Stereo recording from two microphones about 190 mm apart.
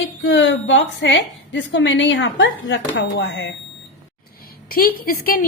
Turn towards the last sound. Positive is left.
turn(degrees=50)  # may be behind; listen again after turning